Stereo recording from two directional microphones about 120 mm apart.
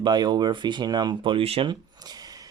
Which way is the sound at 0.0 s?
35° right (ahead or behind).